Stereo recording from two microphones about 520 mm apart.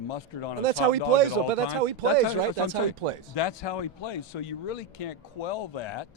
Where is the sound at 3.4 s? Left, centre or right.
Left.